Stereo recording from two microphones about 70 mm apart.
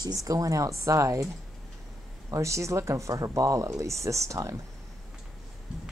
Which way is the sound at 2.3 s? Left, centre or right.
Right.